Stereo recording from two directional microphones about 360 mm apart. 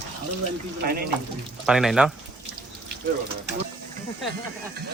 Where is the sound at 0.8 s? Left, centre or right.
Right.